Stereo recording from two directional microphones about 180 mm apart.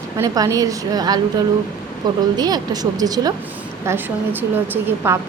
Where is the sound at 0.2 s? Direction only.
20° right (ahead or behind).